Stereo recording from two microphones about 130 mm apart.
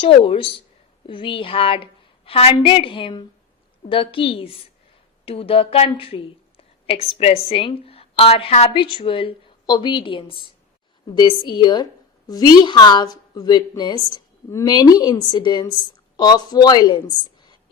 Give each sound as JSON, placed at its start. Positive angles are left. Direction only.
{"t": 0.0, "sound": "a woman's voice", "side_deg": 45}